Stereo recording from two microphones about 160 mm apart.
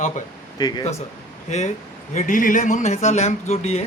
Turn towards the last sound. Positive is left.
turn(degrees=40)  # may be behind; listen again after turning